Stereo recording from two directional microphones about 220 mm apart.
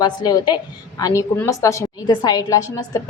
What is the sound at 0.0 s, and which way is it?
A woman's voice, 20° left (ahead or behind).